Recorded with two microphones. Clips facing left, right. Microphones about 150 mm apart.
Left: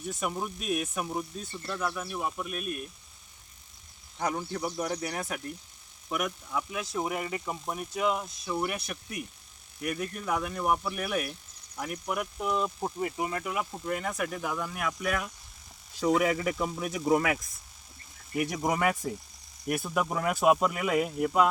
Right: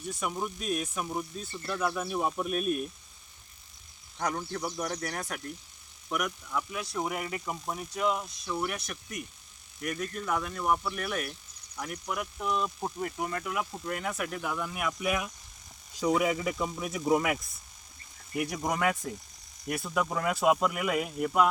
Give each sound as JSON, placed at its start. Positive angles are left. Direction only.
{"t": 0.1, "sound": "speech", "side_deg": 0}
{"t": 1.7, "sound": "speech", "side_deg": -10}
{"t": 2.5, "sound": "speech", "side_deg": -35}
{"t": 4.2, "sound": "speech", "side_deg": 5}
{"t": 12.5, "sound": "speech", "side_deg": 5}
{"t": 16.0, "sound": "speech", "side_deg": 0}
{"t": 18.5, "sound": "speech", "side_deg": 5}